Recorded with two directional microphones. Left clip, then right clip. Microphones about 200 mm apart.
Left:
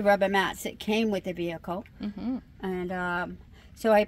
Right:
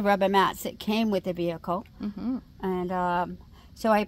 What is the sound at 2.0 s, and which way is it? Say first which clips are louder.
Speech: right 1 dB; 5° right (ahead or behind).